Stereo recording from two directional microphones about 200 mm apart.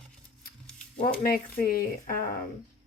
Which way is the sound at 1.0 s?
45° left (ahead or behind).